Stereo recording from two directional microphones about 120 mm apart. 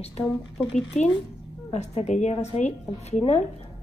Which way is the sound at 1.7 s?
65° left (ahead or behind).